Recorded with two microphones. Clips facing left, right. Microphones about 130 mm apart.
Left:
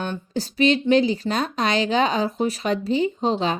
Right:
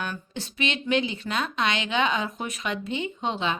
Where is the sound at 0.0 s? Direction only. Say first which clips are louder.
Left 6 dB; 35° left (ahead or behind).